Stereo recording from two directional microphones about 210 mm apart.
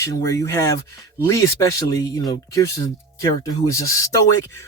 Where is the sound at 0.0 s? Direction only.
15° left (ahead or behind).